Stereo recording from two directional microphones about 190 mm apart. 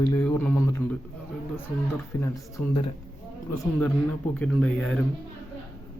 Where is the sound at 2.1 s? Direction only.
15° left (ahead or behind).